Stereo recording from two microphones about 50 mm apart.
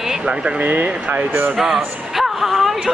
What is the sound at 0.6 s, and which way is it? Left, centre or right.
Speech, right.